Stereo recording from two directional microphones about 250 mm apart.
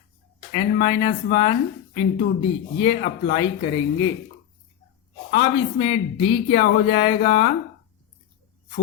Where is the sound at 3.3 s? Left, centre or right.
Left.